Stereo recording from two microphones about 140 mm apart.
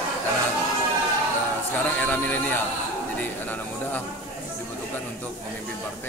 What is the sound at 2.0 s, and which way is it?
Speech, 10° left (ahead or behind).